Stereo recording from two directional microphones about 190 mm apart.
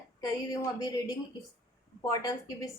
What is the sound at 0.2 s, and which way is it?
A woman's voice, 20° left (ahead or behind).